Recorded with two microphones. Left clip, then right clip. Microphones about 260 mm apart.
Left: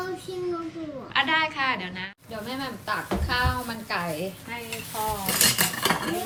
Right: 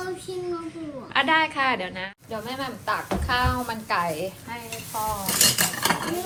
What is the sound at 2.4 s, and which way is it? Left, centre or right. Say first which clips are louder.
A woman's voice: right 2 dB; right.